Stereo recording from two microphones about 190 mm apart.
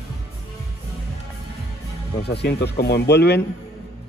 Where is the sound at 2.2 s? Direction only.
60° left (ahead or behind).